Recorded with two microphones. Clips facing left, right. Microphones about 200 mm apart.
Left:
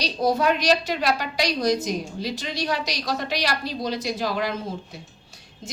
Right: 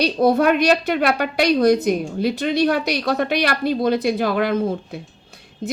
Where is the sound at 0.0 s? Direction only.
55° right (ahead or behind).